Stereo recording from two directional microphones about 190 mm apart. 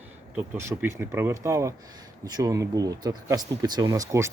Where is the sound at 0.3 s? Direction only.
15° right (ahead or behind).